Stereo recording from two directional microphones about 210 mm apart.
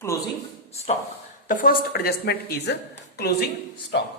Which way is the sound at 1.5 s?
40° left (ahead or behind).